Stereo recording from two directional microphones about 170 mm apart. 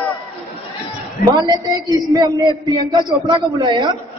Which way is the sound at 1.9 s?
20° right (ahead or behind).